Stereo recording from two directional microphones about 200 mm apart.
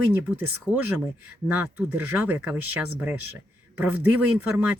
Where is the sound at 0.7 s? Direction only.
20° left (ahead or behind).